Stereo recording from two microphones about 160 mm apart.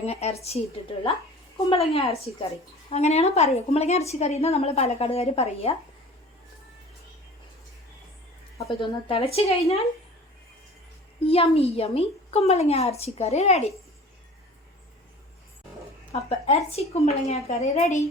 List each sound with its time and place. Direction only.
0.0 s a woman's voice: 40° left (ahead or behind)
8.8 s a woman's voice: 35° left (ahead or behind)
11.3 s a woman's voice: 35° left (ahead or behind)
16.5 s a woman's voice: 40° left (ahead or behind)